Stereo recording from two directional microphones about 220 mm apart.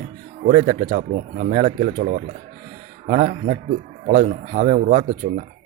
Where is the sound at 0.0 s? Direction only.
35° right (ahead or behind).